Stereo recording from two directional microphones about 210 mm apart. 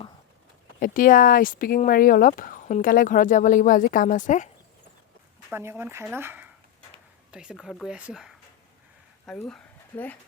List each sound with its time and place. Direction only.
0.8 s speech: 40° left (ahead or behind)
5.5 s speech: 10° right (ahead or behind); by 10.2 s 10° left (ahead or behind)